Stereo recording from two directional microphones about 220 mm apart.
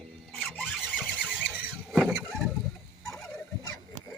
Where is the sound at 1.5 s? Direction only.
5° right (ahead or behind).